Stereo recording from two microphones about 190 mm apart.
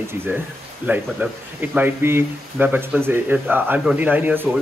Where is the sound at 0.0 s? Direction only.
10° right (ahead or behind).